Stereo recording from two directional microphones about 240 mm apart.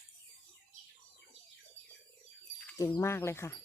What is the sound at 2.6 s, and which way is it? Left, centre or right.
Speech, centre.